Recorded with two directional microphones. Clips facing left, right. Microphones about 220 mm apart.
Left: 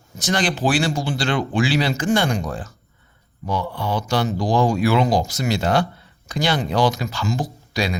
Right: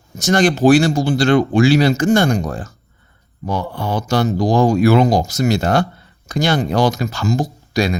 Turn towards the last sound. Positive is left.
turn(degrees=-45)  # may be behind; listen again after turning